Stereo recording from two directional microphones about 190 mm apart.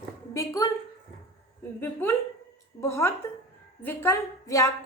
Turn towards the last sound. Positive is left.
turn(degrees=15)  # may be behind; listen again after turning